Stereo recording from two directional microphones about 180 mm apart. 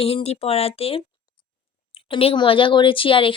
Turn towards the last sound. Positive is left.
turn(degrees=30)  # may be behind; listen again after turning